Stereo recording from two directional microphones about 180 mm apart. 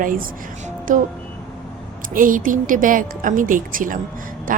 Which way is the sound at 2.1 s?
50° right (ahead or behind).